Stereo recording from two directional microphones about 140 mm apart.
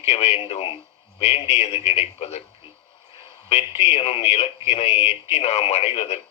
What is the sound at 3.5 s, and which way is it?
Speech, 50° left (ahead or behind).